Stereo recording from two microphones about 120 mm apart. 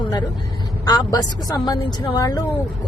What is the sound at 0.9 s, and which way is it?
Speech, 30° left (ahead or behind).